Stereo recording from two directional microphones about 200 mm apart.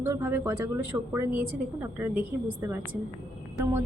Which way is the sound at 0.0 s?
10° right (ahead or behind).